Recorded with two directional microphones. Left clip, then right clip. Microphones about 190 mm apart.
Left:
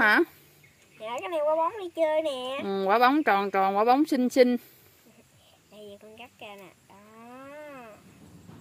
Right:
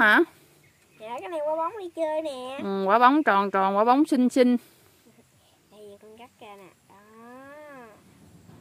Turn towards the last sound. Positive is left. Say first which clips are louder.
# left 1 dB
turn(degrees=-5)  # may be behind; listen again after turning